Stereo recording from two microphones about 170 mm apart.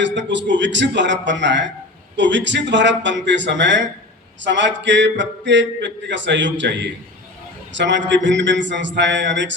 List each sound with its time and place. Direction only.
0.0 s a man's voice: 90° right